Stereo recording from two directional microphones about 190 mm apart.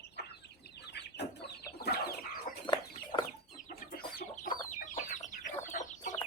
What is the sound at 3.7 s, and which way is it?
Chicken, 55° left (ahead or behind).